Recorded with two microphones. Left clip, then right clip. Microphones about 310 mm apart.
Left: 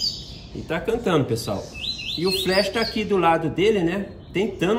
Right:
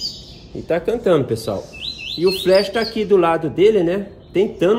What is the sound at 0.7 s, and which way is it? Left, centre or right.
A man's voice, centre.